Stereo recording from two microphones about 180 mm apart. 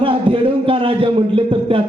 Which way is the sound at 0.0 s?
30° right (ahead or behind).